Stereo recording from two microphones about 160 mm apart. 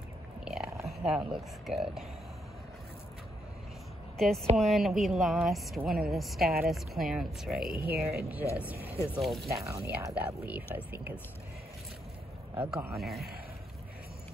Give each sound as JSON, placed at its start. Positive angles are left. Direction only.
{"t": 0.8, "sound": "speech", "side_deg": -5}
{"t": 4.2, "sound": "speech", "side_deg": 0}
{"t": 9.7, "sound": "speech", "side_deg": -20}
{"t": 12.5, "sound": "speech", "side_deg": -5}